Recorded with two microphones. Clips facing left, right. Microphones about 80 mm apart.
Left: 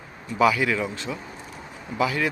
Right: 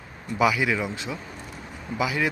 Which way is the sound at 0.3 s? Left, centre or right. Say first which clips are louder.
Left 2 dB; centre.